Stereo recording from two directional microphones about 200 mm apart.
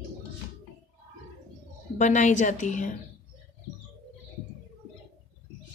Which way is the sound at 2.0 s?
35° left (ahead or behind).